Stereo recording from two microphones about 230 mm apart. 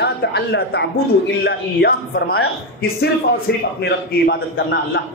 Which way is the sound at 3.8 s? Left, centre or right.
Left.